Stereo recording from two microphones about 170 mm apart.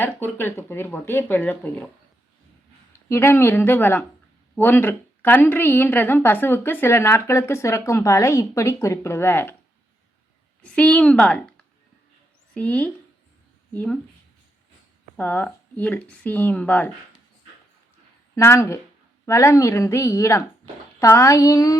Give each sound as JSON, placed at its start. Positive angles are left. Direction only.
{"t": 0.0, "sound": "a woman's voice", "side_deg": 10}
{"t": 3.1, "sound": "a woman's voice", "side_deg": 15}
{"t": 10.6, "sound": "a woman's voice", "side_deg": 5}
{"t": 15.1, "sound": "a woman's voice", "side_deg": 10}
{"t": 18.3, "sound": "a woman's voice", "side_deg": 15}